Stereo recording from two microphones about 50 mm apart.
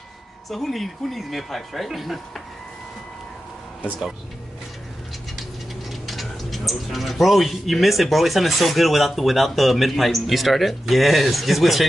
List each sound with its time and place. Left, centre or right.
0.5 s speech: centre
5.9 s speech: centre